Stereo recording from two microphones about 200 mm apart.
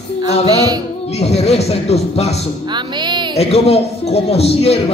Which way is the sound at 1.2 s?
30° left (ahead or behind).